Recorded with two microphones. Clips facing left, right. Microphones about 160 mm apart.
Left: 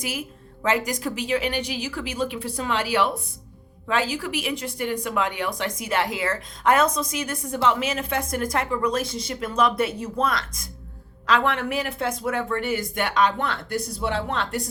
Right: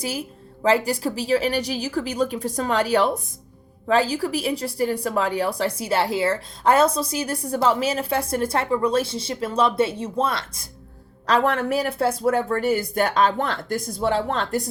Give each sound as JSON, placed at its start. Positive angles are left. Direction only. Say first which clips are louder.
{"t": 0.0, "sound": "a sound", "louder": "right 3 dB", "side_deg": -35}
{"t": 0.9, "sound": "a woman's voice", "louder": "right 4 dB", "side_deg": -35}
{"t": 11.3, "sound": "a woman's voice", "louder": "right 3 dB", "side_deg": -40}